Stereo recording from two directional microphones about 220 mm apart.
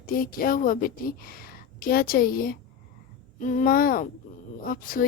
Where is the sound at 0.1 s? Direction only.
40° left (ahead or behind).